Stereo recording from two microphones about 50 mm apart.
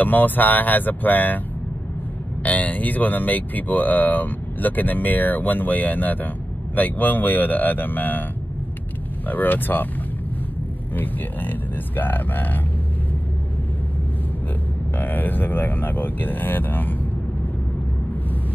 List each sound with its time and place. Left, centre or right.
0.0 s speech: left
2.4 s speech: left
9.3 s speech: left
11.0 s speech: left
15.0 s speech: left